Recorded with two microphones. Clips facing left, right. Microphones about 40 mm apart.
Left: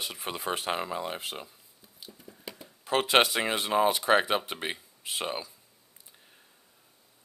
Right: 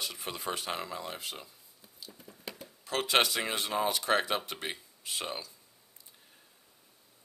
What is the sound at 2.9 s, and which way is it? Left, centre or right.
Speech, left.